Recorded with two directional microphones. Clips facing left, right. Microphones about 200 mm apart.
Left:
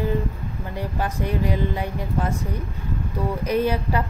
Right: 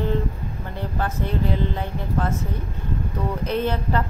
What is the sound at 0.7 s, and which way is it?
Speech, 15° left (ahead or behind).